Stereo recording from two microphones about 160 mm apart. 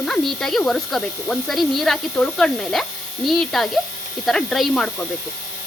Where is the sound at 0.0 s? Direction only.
Centre (ahead or behind).